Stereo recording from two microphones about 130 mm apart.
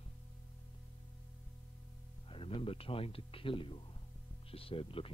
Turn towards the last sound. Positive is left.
turn(degrees=45)  # may be behind; listen again after turning